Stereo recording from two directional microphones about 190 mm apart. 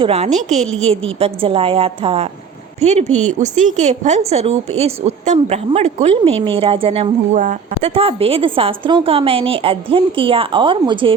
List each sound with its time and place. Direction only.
0.0 s a woman's voice: 35° right (ahead or behind)